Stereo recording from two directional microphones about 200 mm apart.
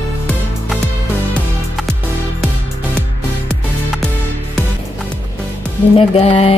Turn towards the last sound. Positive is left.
turn(degrees=30)  # may be behind; listen again after turning